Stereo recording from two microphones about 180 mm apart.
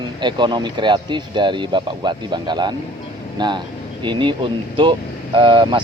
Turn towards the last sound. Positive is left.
turn(degrees=-25)  # may be behind; listen again after turning